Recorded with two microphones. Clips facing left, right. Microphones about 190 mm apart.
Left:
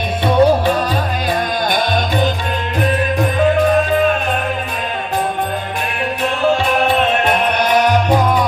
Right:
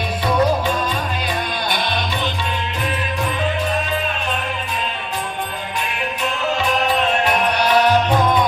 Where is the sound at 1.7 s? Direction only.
45° left (ahead or behind).